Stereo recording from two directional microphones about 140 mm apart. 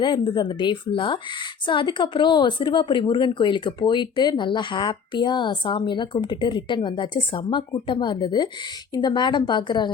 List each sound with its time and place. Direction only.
0.0 s a woman's voice: 35° left (ahead or behind)